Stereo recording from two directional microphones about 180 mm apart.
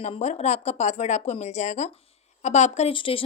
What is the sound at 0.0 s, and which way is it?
Speech, 40° left (ahead or behind).